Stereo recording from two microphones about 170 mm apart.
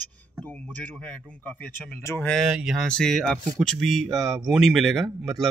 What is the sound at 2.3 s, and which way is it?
Speech, centre (ahead or behind).